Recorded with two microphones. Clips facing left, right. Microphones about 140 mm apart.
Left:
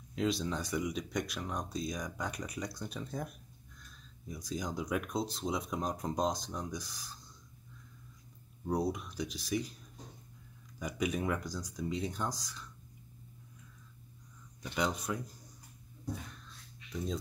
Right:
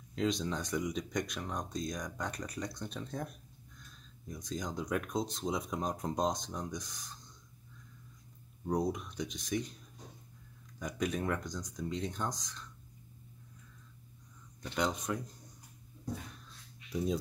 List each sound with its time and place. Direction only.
0.1 s speech: 5° left (ahead or behind)
8.6 s speech: 5° left (ahead or behind)
10.8 s speech: 5° left (ahead or behind)
14.6 s speech: 5° left (ahead or behind)
16.9 s speech: 10° right (ahead or behind)